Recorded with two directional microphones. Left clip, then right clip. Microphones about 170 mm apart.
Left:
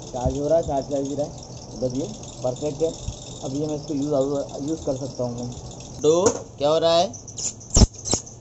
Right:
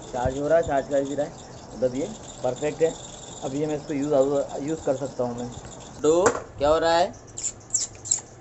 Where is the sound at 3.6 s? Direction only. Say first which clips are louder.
Even; 50° right (ahead or behind).